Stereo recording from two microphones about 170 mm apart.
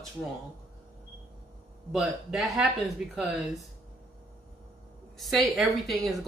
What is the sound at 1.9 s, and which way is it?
Speech, centre (ahead or behind).